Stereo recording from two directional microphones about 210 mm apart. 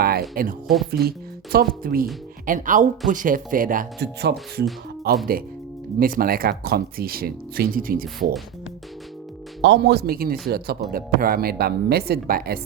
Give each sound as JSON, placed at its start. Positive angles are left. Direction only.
{"t": 0.0, "sound": "speech", "side_deg": -45}
{"t": 9.6, "sound": "speech", "side_deg": -55}